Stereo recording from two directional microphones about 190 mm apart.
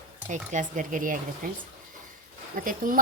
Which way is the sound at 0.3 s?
40° right (ahead or behind).